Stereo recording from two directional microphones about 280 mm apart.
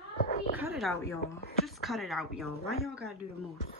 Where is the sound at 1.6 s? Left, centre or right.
Centre.